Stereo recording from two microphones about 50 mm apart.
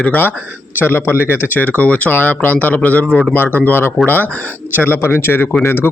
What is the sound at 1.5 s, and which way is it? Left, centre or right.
Speech, left.